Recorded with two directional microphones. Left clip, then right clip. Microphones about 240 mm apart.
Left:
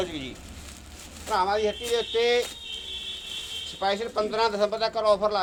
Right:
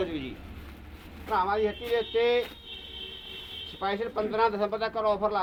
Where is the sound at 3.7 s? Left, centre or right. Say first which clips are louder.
Left 3 dB; left.